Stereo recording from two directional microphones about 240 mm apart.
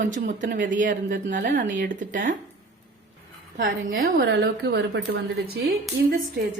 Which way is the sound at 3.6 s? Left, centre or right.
Right.